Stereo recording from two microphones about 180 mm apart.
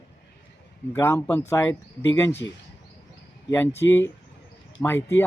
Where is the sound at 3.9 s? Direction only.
10° left (ahead or behind).